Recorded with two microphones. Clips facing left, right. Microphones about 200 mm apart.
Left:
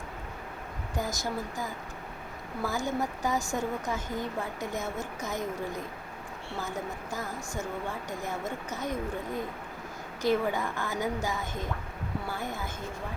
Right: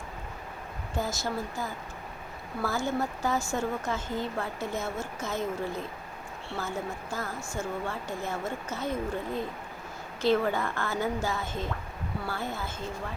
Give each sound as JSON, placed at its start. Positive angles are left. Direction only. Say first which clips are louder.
{"t": 0.9, "sound": "speech", "louder": "right 1 dB", "side_deg": 15}
{"t": 2.6, "sound": "speech", "louder": "right 1 dB", "side_deg": 15}